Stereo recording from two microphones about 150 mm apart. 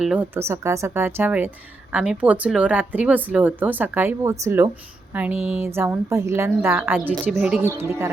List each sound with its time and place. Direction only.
0.0 s speech: 5° right (ahead or behind)
0.3 s speech: 20° right (ahead or behind)